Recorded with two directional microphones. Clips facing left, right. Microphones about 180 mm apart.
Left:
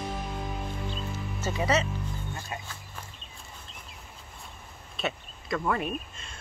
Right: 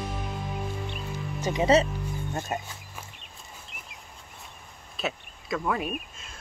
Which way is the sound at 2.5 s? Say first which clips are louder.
Right 7 dB; 45° right (ahead or behind).